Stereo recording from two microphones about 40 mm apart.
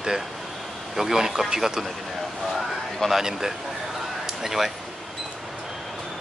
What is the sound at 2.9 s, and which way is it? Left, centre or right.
Speech, centre.